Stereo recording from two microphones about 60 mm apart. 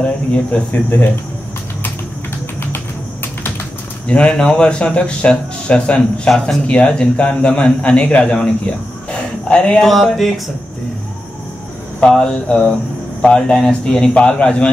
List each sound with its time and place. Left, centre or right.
0.7 s speech: left
4.1 s speech: centre
9.1 s a sound: centre
9.8 s speech: centre
12.0 s speech: centre